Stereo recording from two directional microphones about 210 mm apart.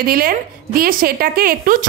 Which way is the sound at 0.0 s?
45° right (ahead or behind).